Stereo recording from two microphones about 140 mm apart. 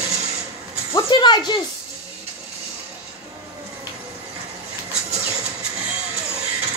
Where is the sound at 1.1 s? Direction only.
35° left (ahead or behind).